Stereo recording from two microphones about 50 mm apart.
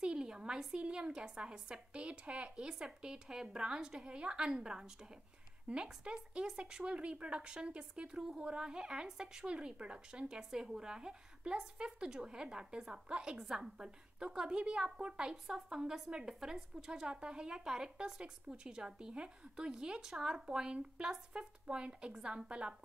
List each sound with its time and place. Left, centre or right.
0.0 s speech: centre